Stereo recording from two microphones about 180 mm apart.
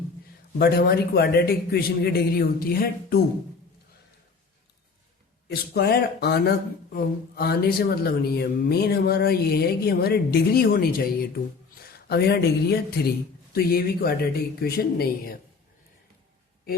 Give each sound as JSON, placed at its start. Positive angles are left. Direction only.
{"t": 0.6, "sound": "speech", "side_deg": 60}
{"t": 5.5, "sound": "speech", "side_deg": 65}